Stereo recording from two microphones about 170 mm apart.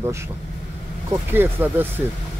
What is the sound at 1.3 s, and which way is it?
Speech, 10° right (ahead or behind).